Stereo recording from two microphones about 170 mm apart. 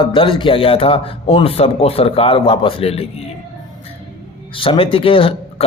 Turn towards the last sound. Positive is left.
turn(degrees=30)  # may be behind; listen again after turning